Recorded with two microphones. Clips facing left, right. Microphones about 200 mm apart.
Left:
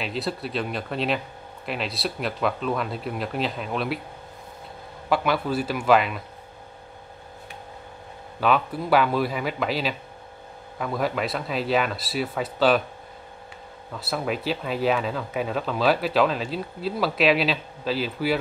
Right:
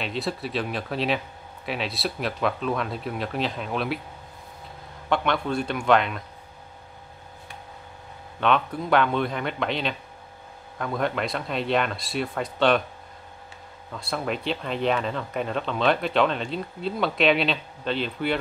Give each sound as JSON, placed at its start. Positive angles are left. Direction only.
{"t": 0.0, "sound": "speech", "side_deg": 0}
{"t": 5.1, "sound": "speech", "side_deg": 5}
{"t": 8.4, "sound": "speech", "side_deg": 5}
{"t": 13.9, "sound": "speech", "side_deg": 5}